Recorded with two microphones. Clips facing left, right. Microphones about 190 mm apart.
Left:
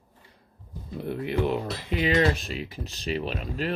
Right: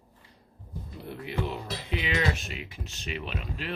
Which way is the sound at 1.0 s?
55° left (ahead or behind).